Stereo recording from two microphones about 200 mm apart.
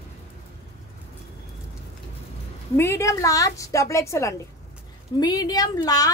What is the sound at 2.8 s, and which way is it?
A woman's voice, 15° left (ahead or behind).